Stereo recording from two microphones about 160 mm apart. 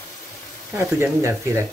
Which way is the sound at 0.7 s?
15° right (ahead or behind).